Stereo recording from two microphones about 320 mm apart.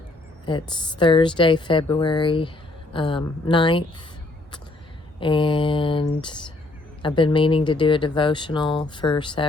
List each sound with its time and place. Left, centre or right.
0.4 s speech: centre
5.2 s speech: centre